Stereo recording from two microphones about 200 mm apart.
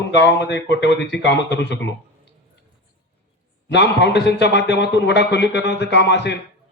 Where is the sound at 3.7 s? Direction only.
60° left (ahead or behind).